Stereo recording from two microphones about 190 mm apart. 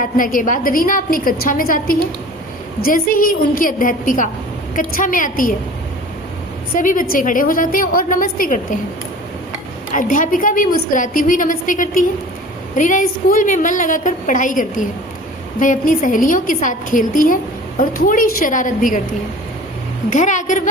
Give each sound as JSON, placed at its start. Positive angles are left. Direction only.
{"t": 0.0, "sound": "a woman's voice", "side_deg": 45}
{"t": 6.7, "sound": "a woman's voice", "side_deg": 45}
{"t": 9.9, "sound": "a woman's voice", "side_deg": 45}
{"t": 20.1, "sound": "a woman's voice", "side_deg": 40}